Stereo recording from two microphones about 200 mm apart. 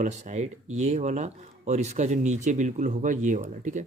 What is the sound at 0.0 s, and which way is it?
Speech, 35° right (ahead or behind).